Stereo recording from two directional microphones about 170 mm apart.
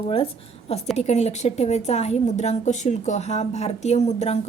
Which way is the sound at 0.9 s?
40° left (ahead or behind).